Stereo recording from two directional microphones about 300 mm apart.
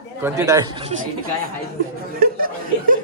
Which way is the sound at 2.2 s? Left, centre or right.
Right.